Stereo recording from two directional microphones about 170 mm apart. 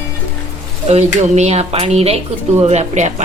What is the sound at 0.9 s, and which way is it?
Speech, 40° right (ahead or behind).